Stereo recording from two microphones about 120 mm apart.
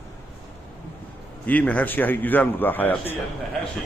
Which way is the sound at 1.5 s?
10° left (ahead or behind).